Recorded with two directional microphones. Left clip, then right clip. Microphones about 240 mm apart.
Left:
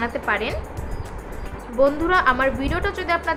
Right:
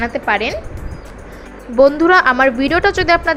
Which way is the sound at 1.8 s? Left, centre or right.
Right.